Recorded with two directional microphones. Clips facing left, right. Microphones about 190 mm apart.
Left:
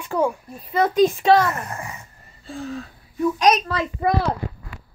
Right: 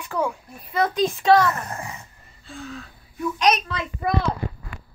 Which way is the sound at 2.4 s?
40° left (ahead or behind).